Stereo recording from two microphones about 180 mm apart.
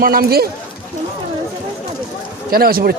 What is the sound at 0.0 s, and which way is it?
Speech, 55° right (ahead or behind).